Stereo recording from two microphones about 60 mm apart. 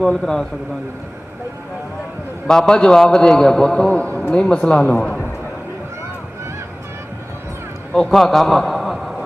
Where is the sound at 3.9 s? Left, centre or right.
Left.